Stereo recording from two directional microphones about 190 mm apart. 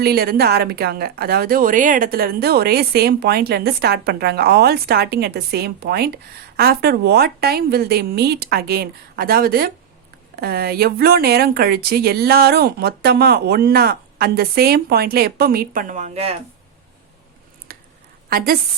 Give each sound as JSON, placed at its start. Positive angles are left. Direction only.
{"t": 0.0, "sound": "a woman's voice", "side_deg": -55}
{"t": 17.7, "sound": "a sound", "side_deg": -50}
{"t": 18.3, "sound": "a woman's voice", "side_deg": -50}